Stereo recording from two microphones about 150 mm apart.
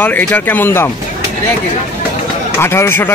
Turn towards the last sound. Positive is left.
turn(degrees=15)  # may be behind; listen again after turning